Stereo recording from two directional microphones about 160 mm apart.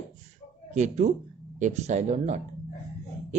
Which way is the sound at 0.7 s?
45° right (ahead or behind).